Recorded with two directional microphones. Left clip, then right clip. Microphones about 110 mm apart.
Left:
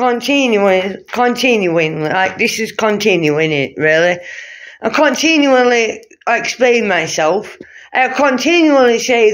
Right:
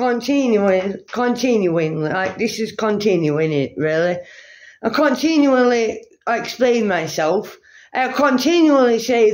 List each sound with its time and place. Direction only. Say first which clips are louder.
0.2 s speech: left 5 dB; 10° right (ahead or behind); by 9.3 s 30° right (ahead or behind)